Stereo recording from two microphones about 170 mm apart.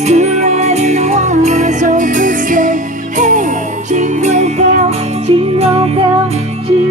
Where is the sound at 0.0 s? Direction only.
40° right (ahead or behind).